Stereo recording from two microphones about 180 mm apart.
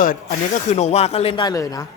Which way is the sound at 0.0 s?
50° left (ahead or behind).